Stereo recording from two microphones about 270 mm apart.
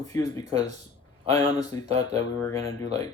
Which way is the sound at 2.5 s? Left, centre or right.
Right.